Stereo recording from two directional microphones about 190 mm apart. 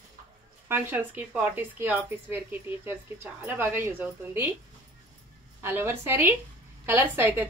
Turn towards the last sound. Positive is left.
turn(degrees=-10)  # may be behind; listen again after turning